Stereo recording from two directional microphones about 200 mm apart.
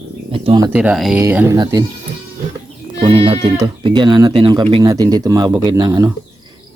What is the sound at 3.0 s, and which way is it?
Speech, 25° right (ahead or behind).